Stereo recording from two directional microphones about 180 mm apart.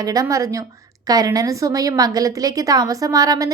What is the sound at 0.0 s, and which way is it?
A woman's voice, 20° right (ahead or behind).